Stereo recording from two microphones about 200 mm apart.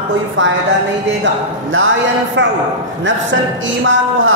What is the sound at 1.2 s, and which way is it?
Speech, 75° right (ahead or behind).